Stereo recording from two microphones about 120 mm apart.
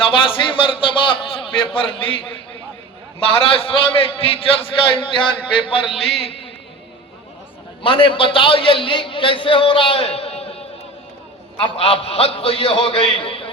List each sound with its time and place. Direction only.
0.0 s a man's voice: 45° left (ahead or behind)
7.8 s a man's voice: 45° left (ahead or behind)